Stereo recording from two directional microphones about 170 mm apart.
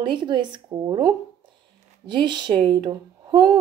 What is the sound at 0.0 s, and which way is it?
Speech, 30° right (ahead or behind).